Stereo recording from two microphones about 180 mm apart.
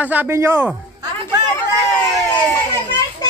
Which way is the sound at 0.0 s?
10° right (ahead or behind).